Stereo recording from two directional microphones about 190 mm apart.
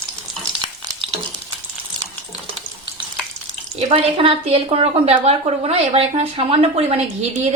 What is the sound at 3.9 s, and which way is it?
A woman's voice, 30° right (ahead or behind).